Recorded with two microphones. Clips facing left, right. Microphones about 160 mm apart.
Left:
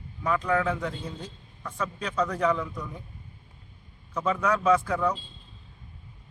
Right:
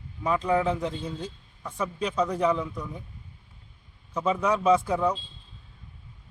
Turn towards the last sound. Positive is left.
turn(degrees=-15)  # may be behind; listen again after turning